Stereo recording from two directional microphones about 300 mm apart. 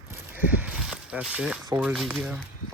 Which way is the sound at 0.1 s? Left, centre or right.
Centre.